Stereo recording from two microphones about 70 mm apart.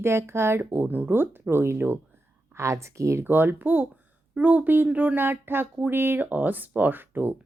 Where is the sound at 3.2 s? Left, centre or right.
Right.